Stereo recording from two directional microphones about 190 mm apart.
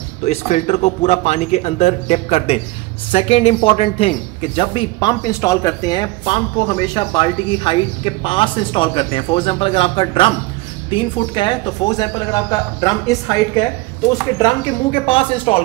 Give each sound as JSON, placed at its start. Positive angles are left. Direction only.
{"t": 0.5, "sound": "a man's voice", "side_deg": 35}